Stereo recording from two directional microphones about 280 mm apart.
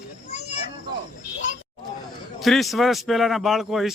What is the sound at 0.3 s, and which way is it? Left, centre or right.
Children playing, left.